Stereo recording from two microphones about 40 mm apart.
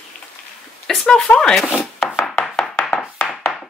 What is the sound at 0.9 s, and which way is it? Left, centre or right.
Speech, centre.